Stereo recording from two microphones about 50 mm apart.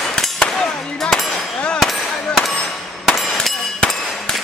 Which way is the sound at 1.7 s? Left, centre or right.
Centre.